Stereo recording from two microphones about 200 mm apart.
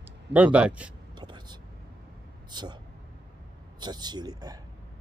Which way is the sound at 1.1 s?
20° right (ahead or behind).